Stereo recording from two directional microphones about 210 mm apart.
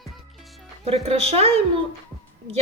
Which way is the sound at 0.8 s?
30° right (ahead or behind).